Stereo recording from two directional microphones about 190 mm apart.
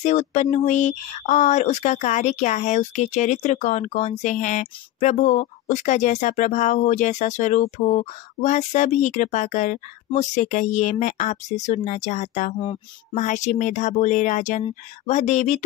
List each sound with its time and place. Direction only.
0.0 s speech: 35° left (ahead or behind)